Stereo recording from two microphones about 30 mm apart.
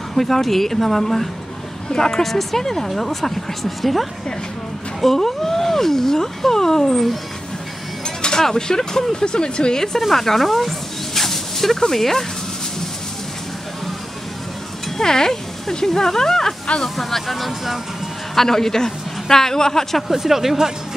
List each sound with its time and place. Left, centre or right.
0.1 s speech: centre
1.9 s speech: centre
5.0 s speech: centre
8.0 s vehicle: left
8.4 s speech: centre
9.9 s speech: centre
11.1 s a sound: centre
15.0 s speech: centre
16.9 s speech: centre
18.3 s speech: centre
20.1 s speech: centre